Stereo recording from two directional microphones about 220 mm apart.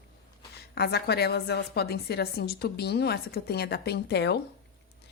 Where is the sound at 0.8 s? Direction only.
45° left (ahead or behind).